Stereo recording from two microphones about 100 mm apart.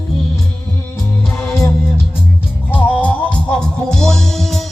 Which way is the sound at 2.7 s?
15° left (ahead or behind).